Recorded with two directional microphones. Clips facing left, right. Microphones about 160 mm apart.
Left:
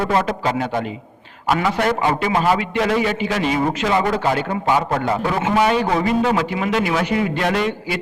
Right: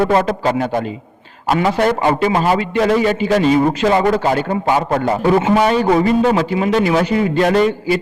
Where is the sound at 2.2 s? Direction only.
35° right (ahead or behind).